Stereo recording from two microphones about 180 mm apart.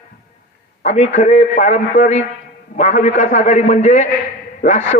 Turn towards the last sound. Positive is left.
turn(degrees=45)  # may be behind; listen again after turning